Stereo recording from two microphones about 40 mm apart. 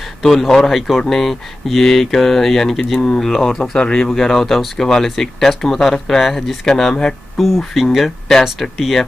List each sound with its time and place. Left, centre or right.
0.2 s speech: centre
3.7 s speech: left
4.1 s speech: centre
7.3 s speech: centre
8.3 s speech: centre